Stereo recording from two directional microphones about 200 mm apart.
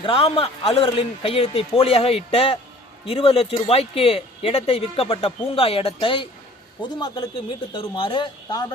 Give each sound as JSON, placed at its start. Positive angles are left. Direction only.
{"t": 0.0, "sound": "speech", "side_deg": 25}